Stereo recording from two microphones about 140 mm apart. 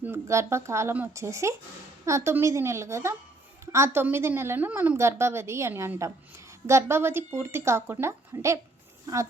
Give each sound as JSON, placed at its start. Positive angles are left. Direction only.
{"t": 0.0, "sound": "a woman's voice", "side_deg": -20}